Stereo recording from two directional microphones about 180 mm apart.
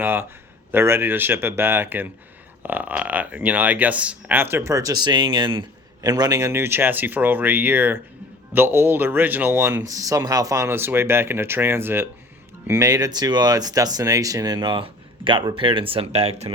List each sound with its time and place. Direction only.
0.0 s speech: 10° right (ahead or behind); by 16.5 s 35° right (ahead or behind)